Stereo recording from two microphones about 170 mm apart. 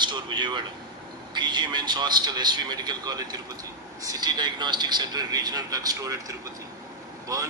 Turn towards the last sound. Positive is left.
turn(degrees=-20)  # may be behind; listen again after turning